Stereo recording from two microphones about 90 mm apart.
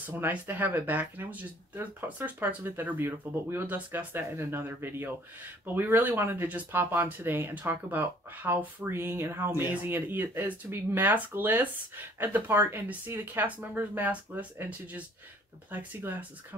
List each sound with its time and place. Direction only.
0.0 s speech: 20° right (ahead or behind)